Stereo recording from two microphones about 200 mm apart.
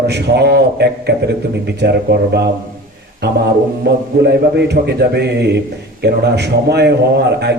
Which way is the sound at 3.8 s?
55° right (ahead or behind).